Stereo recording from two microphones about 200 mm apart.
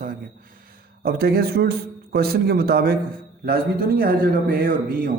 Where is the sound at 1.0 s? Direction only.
50° right (ahead or behind).